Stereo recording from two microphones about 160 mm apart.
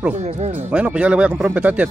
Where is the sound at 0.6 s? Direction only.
10° right (ahead or behind).